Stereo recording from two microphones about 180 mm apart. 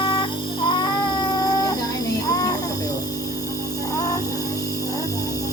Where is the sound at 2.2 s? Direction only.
20° left (ahead or behind).